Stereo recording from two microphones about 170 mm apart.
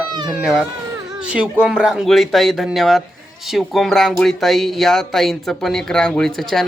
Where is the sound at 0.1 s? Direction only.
25° right (ahead or behind).